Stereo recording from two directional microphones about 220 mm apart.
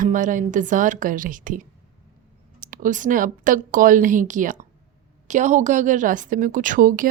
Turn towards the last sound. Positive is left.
turn(degrees=-40)  # may be behind; listen again after turning